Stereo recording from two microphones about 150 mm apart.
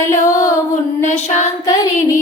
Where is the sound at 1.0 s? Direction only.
50° left (ahead or behind).